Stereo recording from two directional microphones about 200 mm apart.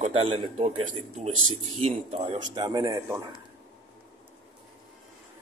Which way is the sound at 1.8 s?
30° right (ahead or behind).